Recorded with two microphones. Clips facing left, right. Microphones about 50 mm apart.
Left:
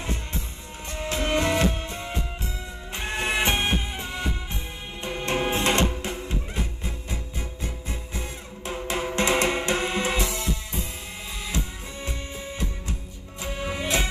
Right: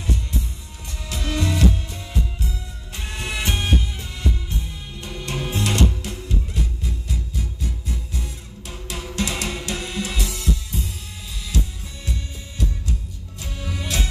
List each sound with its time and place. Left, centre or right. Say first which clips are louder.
0.0 s music: right 3 dB; left